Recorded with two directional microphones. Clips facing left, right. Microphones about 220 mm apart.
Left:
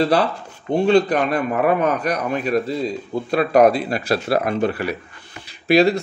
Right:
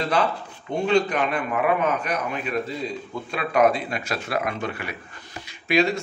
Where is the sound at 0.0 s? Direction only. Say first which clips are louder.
Left 5 dB; 35° left (ahead or behind).